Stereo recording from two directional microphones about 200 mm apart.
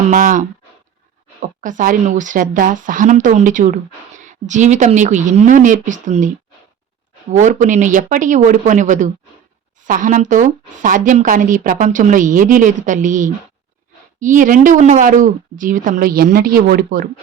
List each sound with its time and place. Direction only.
0.1 s speech: 40° right (ahead or behind)